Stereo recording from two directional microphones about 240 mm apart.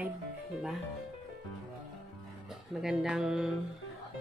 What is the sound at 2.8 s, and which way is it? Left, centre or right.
Speech, centre.